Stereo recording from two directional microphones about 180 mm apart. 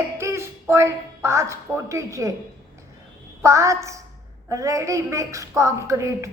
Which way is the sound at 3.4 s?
15° right (ahead or behind).